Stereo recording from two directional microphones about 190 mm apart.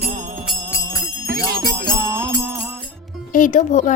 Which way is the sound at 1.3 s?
55° right (ahead or behind).